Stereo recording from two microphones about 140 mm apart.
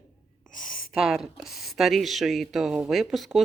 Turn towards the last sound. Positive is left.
turn(degrees=0)  # may be behind; listen again after turning